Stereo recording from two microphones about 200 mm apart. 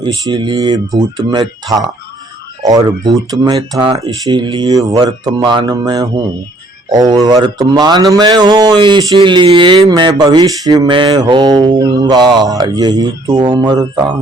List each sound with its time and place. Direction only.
0.0 s speech: 25° right (ahead or behind)